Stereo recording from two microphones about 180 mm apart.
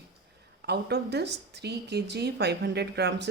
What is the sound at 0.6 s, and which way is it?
Speech, 65° right (ahead or behind).